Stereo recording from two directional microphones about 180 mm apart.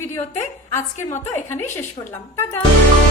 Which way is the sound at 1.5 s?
10° left (ahead or behind).